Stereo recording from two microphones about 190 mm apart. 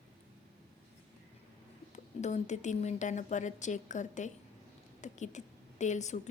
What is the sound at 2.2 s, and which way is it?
A woman's voice, 40° left (ahead or behind).